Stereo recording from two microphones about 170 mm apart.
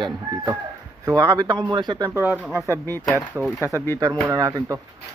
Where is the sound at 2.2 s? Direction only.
10° right (ahead or behind).